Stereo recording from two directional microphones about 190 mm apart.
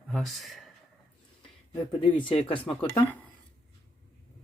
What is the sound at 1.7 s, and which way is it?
Speech, 25° left (ahead or behind).